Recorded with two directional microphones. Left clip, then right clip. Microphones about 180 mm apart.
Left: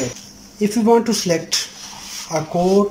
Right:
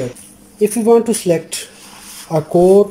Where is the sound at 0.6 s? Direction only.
Centre (ahead or behind).